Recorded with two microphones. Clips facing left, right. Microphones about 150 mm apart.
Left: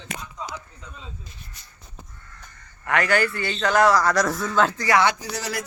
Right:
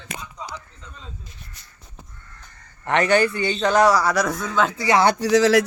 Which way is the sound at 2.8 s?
25° right (ahead or behind).